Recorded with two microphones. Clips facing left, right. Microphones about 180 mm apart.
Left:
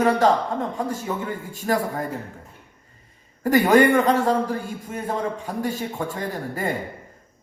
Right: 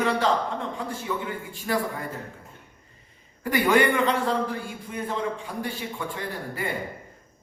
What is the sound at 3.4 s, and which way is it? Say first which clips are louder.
A man's voice: left 5 dB; 45° left (ahead or behind).